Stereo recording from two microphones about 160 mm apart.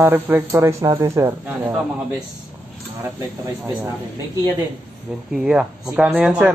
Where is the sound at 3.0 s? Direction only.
15° right (ahead or behind).